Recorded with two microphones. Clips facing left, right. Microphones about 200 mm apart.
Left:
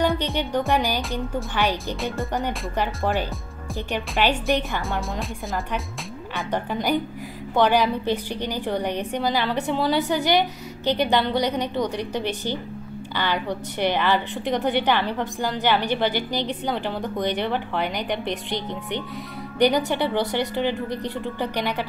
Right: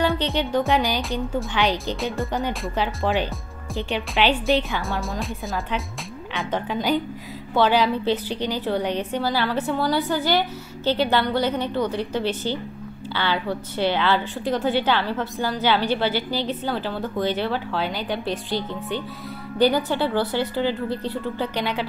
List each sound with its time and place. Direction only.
0.0 s a woman's voice: 15° left (ahead or behind)
4.2 s a woman's voice: 15° left (ahead or behind)
5.1 s speech: centre (ahead or behind)
6.5 s a woman's voice: 10° left (ahead or behind)